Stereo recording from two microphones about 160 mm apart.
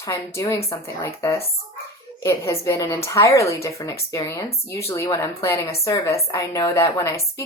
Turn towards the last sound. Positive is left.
turn(degrees=20)  # may be behind; listen again after turning